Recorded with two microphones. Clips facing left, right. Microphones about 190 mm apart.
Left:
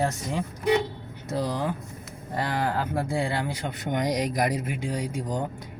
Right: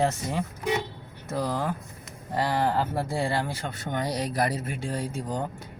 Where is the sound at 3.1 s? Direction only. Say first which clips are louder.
Even; 15° left (ahead or behind).